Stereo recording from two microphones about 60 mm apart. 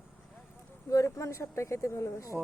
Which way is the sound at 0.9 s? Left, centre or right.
Left.